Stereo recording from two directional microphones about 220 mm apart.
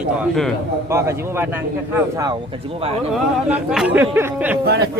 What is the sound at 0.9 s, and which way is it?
Speech, 10° right (ahead or behind).